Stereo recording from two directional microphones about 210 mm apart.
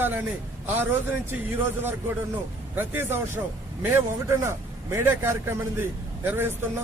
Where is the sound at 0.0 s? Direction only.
10° right (ahead or behind).